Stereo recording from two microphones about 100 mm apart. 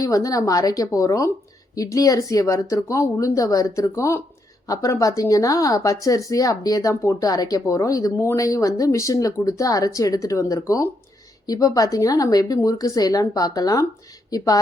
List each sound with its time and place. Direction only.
0.0 s speech: 35° left (ahead or behind)